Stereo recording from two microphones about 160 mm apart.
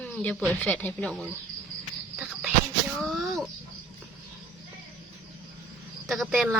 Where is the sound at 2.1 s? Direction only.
5° right (ahead or behind).